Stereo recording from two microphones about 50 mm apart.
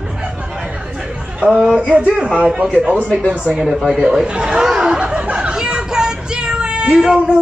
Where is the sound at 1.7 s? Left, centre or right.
Right.